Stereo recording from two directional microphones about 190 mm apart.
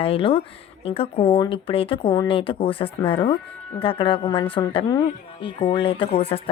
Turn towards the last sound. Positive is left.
turn(degrees=30)  # may be behind; listen again after turning